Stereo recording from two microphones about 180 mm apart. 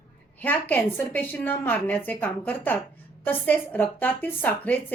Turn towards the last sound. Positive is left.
turn(degrees=10)  # may be behind; listen again after turning